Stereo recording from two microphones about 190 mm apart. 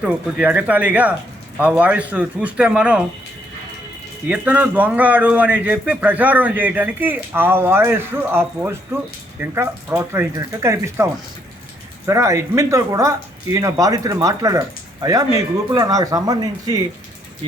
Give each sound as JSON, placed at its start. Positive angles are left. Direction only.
{"t": 0.0, "sound": "a man's voice", "side_deg": -5}
{"t": 4.3, "sound": "a man's voice", "side_deg": -10}